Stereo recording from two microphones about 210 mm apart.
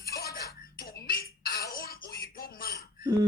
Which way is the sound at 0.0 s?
50° left (ahead or behind).